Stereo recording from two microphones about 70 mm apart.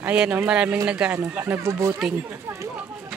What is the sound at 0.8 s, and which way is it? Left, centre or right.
Speech, centre.